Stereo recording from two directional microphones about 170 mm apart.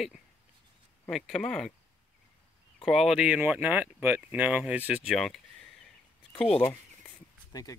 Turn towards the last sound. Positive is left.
turn(degrees=20)  # may be behind; listen again after turning